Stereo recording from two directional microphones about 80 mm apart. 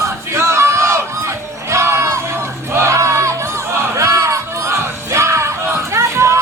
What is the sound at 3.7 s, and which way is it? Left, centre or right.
Music, right.